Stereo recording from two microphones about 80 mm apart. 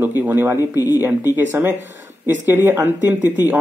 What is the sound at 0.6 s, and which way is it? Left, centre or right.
Speech, left.